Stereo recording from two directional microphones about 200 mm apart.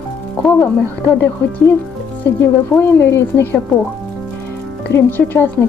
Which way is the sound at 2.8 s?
10° left (ahead or behind).